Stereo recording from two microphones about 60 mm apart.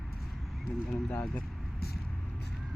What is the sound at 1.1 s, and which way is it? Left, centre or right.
Speech, left.